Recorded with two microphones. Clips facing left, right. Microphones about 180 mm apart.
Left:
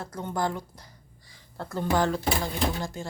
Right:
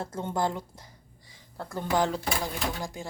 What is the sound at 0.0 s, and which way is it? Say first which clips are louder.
A woman's voice: right 1 dB; 25° right (ahead or behind).